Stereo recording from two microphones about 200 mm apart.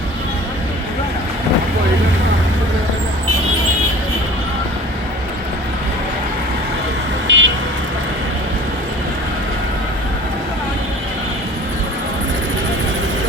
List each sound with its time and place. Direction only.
7.3 s vehicle: 65° right (ahead or behind)